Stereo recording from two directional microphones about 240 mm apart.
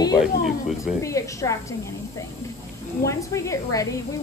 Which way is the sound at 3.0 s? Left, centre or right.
Centre.